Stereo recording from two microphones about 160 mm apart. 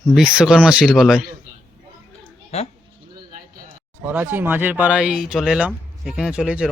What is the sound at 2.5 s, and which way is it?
Speech, 40° left (ahead or behind).